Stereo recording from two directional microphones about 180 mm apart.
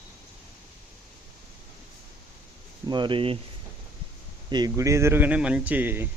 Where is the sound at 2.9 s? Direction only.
25° right (ahead or behind).